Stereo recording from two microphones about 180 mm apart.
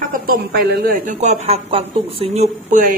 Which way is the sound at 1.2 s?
35° right (ahead or behind).